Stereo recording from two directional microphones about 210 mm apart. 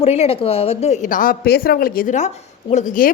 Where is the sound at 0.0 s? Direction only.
30° left (ahead or behind).